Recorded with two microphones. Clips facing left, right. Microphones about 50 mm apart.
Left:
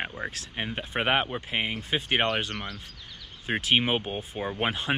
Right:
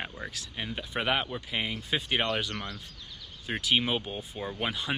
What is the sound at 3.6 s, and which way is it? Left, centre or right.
Speech, left.